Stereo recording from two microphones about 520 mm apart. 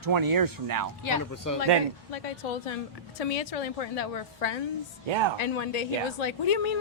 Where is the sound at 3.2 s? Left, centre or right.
Left.